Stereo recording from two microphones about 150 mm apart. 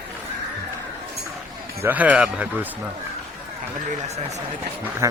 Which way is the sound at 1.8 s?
10° right (ahead or behind).